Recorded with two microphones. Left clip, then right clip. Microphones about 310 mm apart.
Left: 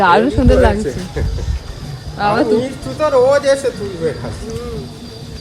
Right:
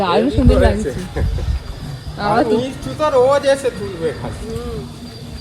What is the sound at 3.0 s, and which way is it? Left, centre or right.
Speech, right.